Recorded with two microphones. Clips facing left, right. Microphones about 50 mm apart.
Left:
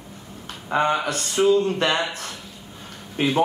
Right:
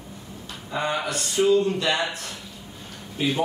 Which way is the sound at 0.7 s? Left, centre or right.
Left.